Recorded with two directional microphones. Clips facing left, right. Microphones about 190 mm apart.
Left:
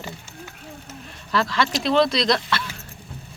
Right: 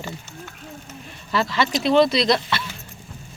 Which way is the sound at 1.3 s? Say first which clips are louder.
Right 1 dB; centre (ahead or behind).